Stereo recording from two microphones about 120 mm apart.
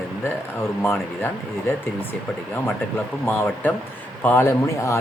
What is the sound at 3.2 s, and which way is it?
Speech, 15° left (ahead or behind).